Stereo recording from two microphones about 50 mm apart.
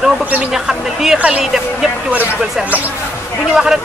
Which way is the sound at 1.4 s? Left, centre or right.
Centre.